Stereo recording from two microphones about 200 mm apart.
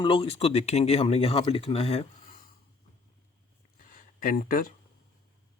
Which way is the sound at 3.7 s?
40° left (ahead or behind).